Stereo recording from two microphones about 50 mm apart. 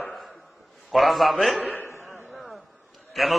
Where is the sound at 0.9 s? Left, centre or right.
Centre.